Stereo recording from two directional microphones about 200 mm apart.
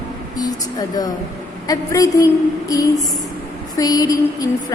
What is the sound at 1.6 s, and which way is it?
Music, 15° left (ahead or behind).